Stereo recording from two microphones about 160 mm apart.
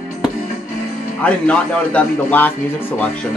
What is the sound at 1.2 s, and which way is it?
Speech, 10° left (ahead or behind).